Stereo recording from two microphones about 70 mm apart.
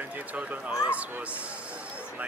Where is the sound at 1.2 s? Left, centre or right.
Centre.